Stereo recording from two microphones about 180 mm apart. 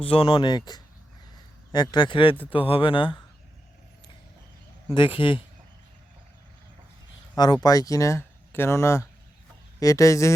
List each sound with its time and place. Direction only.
0.0 s speech: 30° left (ahead or behind)
4.9 s speech: 30° left (ahead or behind)
7.3 s speech: 25° left (ahead or behind)